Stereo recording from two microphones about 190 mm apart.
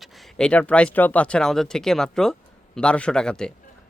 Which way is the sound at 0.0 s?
5° left (ahead or behind).